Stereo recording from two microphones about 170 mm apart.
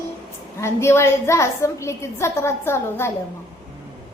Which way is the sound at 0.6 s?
15° left (ahead or behind).